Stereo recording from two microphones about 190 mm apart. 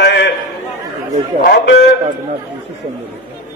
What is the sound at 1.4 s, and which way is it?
Speech, 65° left (ahead or behind).